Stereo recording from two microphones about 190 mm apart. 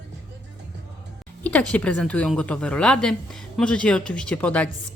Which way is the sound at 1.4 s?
5° left (ahead or behind).